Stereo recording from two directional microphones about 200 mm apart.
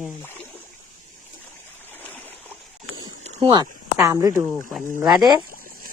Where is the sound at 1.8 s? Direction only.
10° left (ahead or behind).